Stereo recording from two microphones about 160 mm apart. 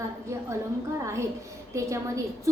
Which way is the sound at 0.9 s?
20° right (ahead or behind).